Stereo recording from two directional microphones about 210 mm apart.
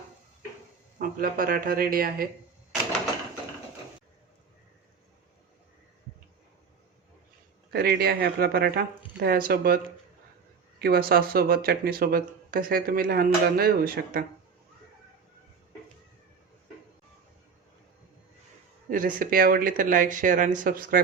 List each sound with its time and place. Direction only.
0.9 s speech: 40° right (ahead or behind)
7.7 s speech: 50° right (ahead or behind)
18.9 s speech: 40° right (ahead or behind)